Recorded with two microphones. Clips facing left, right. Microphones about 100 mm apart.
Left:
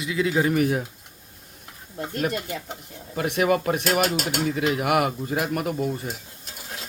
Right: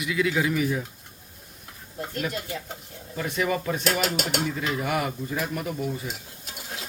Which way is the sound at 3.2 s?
65° left (ahead or behind).